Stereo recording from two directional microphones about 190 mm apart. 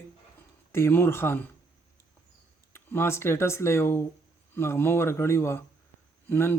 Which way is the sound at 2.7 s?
10° left (ahead or behind).